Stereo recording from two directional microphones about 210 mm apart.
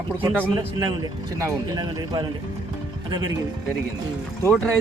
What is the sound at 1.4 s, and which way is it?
Speech, 20° right (ahead or behind).